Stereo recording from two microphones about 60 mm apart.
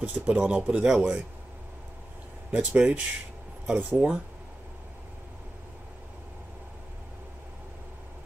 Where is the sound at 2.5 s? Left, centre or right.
Centre.